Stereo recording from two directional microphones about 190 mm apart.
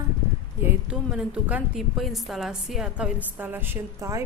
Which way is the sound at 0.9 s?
5° right (ahead or behind).